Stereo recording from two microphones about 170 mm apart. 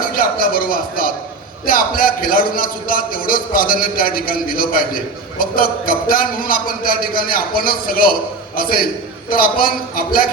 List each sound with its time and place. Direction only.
0.1 s a man's voice: 55° left (ahead or behind)